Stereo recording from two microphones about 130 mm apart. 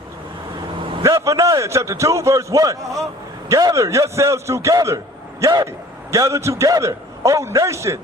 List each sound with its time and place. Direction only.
1.0 s a man's voice: 25° right (ahead or behind)